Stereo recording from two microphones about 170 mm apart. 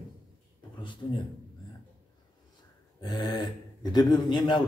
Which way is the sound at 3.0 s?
25° left (ahead or behind).